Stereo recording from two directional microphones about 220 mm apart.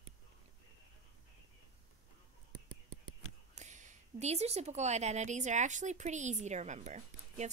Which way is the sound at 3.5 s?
35° right (ahead or behind).